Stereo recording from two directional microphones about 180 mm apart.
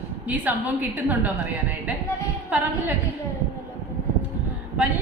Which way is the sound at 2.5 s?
10° right (ahead or behind).